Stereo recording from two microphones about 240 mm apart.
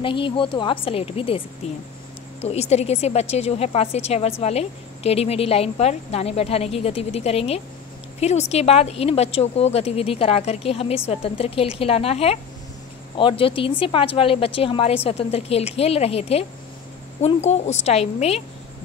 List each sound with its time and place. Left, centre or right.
0.0 s a woman's voice: left
2.4 s a woman's voice: left